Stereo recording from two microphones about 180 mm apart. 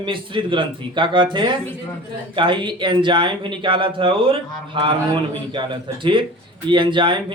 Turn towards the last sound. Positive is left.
turn(degrees=-25)  # may be behind; listen again after turning